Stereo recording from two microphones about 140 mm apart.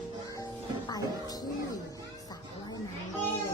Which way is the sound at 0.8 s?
30° left (ahead or behind).